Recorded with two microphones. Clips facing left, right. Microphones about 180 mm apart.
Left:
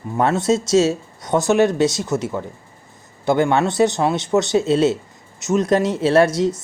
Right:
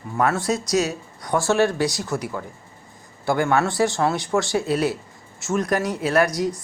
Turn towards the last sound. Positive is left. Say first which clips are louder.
# left 5 dB
turn(degrees=25)  # may be behind; listen again after turning